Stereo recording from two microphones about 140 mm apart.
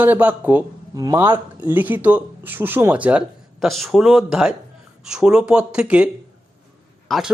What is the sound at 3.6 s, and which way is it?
Speech, centre (ahead or behind).